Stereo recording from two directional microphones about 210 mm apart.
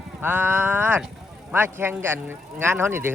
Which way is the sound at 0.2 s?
10° right (ahead or behind).